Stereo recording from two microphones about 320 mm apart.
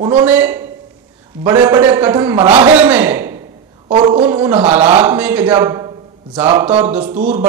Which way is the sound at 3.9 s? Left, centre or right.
Centre.